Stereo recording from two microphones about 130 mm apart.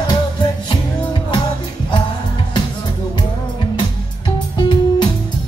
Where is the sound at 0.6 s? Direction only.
35° left (ahead or behind).